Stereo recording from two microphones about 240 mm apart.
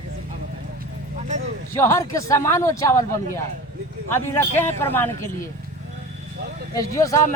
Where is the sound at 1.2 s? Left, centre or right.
Right.